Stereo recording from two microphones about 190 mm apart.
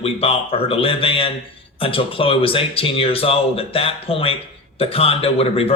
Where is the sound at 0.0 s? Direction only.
30° left (ahead or behind).